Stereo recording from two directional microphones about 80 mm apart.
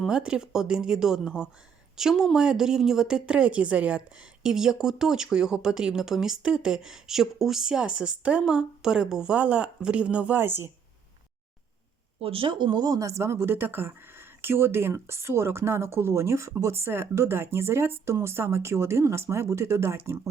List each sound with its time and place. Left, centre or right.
0.1 s speech: centre; by 10.7 s right
12.4 s speech: right